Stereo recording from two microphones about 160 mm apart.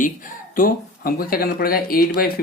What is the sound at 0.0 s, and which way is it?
Speech, 55° left (ahead or behind).